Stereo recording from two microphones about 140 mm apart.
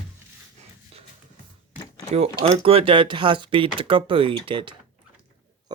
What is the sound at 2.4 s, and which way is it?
Speech, 45° right (ahead or behind).